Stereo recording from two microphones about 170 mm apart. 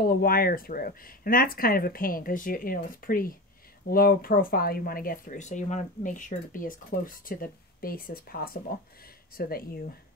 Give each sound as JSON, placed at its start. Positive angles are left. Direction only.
{"t": 0.0, "sound": "speech", "side_deg": 60}